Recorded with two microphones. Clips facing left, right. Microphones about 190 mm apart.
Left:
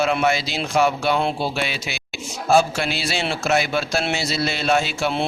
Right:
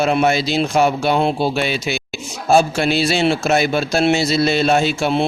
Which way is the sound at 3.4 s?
35° right (ahead or behind).